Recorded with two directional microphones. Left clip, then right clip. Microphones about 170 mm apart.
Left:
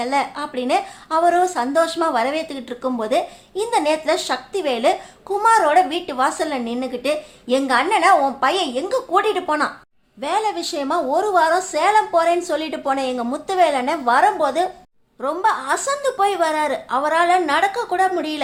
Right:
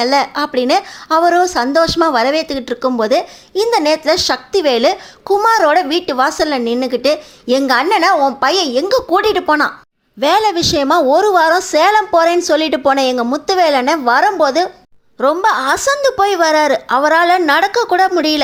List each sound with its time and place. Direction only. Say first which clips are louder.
0.0 s a woman's voice: right 7 dB; 35° right (ahead or behind)